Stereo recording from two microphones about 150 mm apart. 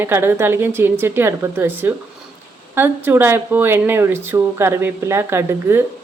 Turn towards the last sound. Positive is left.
turn(degrees=-15)  # may be behind; listen again after turning